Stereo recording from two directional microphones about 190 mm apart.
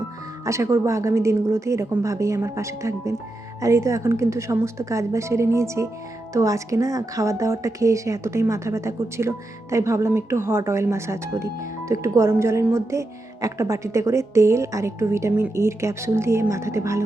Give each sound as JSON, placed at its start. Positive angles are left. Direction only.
{"t": 0.4, "sound": "a woman's voice", "side_deg": -15}